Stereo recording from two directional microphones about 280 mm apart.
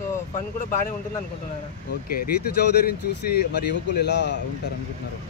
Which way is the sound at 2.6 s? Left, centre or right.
Left.